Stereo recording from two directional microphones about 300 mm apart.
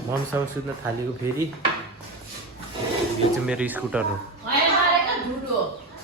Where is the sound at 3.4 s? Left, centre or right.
Centre.